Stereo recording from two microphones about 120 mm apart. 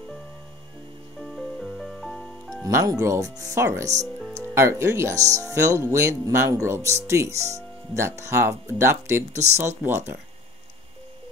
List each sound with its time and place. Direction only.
1.3 s music: centre (ahead or behind)
2.6 s speech: 25° right (ahead or behind)